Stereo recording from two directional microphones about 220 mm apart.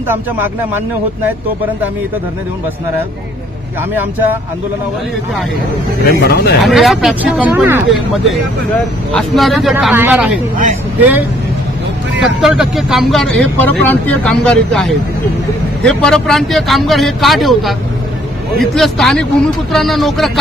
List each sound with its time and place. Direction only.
6.2 s speech: 45° left (ahead or behind)
6.6 s speech: centre (ahead or behind)
12.4 s speech: centre (ahead or behind)